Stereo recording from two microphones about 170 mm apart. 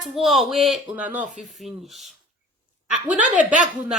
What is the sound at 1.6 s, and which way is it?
Speech, centre (ahead or behind).